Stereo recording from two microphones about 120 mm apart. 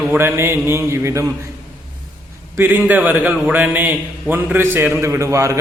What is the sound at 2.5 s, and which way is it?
A man's voice, 15° right (ahead or behind).